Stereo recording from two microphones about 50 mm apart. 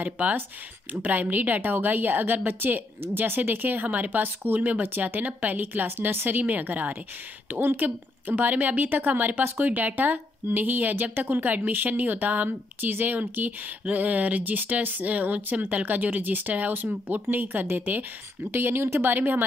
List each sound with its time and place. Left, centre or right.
0.0 s a woman's voice: right
6.4 s a woman's voice: right